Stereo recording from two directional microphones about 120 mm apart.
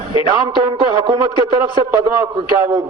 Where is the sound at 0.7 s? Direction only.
35° right (ahead or behind).